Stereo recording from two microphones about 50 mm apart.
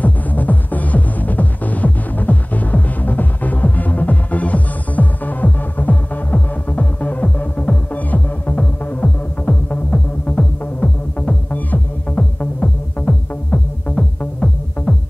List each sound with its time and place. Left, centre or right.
0.0 s music: left